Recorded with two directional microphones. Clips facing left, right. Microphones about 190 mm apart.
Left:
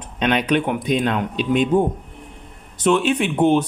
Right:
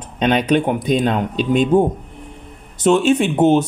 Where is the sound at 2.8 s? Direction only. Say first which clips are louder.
Right 4 dB; 45° right (ahead or behind).